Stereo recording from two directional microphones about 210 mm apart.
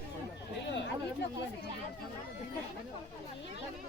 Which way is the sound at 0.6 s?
55° left (ahead or behind).